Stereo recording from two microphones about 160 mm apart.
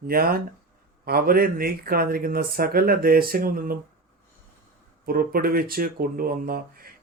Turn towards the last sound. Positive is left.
turn(degrees=-65)  # may be behind; listen again after turning